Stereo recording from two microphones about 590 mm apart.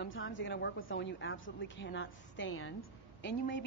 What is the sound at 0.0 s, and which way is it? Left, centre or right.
A woman's voice, centre.